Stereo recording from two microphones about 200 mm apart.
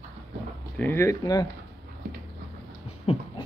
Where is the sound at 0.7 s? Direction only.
10° left (ahead or behind).